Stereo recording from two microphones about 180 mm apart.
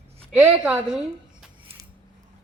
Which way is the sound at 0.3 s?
5° right (ahead or behind).